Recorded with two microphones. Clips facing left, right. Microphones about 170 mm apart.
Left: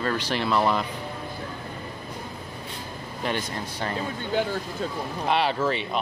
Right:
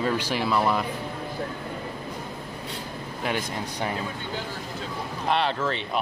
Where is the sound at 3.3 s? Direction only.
10° right (ahead or behind).